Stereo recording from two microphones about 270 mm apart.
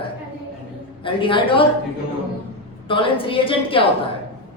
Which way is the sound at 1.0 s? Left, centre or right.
Centre.